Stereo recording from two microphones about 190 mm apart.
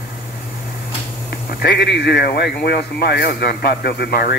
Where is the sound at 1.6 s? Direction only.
65° left (ahead or behind).